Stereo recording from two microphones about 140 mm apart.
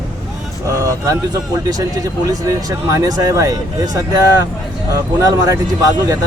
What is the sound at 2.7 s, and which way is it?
Speech, 25° right (ahead or behind).